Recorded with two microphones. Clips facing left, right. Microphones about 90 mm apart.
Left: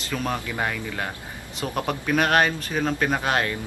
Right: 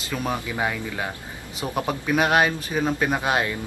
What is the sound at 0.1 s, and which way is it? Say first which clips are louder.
A man's voice: right 1 dB; 15° right (ahead or behind).